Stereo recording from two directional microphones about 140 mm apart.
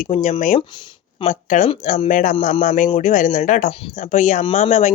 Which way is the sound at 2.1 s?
70° left (ahead or behind).